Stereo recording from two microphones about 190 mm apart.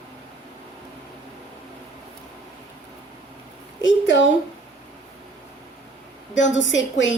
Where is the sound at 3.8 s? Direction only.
80° left.